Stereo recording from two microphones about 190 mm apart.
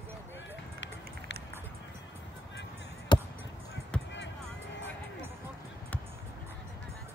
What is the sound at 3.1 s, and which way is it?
Basketball bounce, 25° left (ahead or behind).